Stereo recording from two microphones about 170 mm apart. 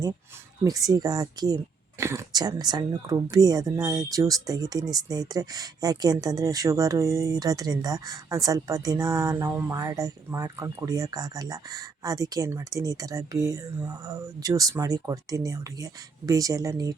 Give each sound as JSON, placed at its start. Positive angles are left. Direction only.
{"t": 0.6, "sound": "speech", "side_deg": -20}